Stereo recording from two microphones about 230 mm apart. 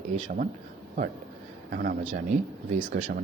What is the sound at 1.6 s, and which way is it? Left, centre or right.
Speech, right.